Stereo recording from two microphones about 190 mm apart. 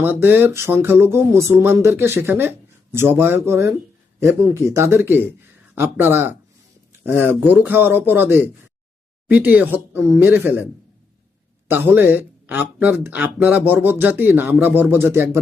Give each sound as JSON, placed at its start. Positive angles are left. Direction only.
{"t": 0.0, "sound": "speech", "side_deg": -10}
{"t": 11.7, "sound": "speech", "side_deg": -10}